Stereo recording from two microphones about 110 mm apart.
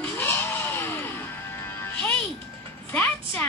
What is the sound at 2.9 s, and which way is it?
Speech, 15° left (ahead or behind).